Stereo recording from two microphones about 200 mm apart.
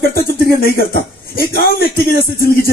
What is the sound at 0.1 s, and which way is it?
Speech, 50° left (ahead or behind).